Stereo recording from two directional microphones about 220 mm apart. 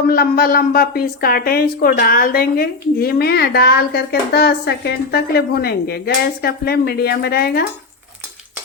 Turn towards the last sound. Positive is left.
turn(degrees=45)  # may be behind; listen again after turning